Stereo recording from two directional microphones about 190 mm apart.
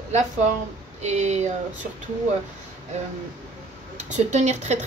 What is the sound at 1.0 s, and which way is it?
Speech, 35° right (ahead or behind).